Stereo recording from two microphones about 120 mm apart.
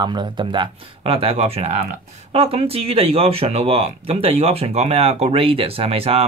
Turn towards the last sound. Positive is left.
turn(degrees=-55)  # may be behind; listen again after turning